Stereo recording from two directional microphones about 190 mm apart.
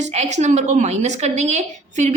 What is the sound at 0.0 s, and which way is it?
A woman's voice, 35° right (ahead or behind).